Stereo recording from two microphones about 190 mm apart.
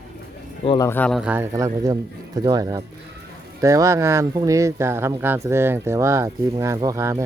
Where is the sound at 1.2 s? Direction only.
10° right (ahead or behind).